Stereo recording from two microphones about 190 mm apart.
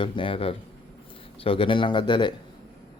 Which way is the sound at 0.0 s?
25° left (ahead or behind).